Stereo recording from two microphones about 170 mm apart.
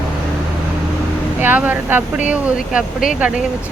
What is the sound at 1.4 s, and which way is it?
Speech, 10° right (ahead or behind).